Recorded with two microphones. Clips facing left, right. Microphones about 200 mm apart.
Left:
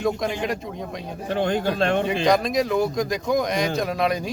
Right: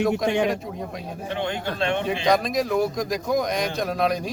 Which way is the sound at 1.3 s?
40° left (ahead or behind).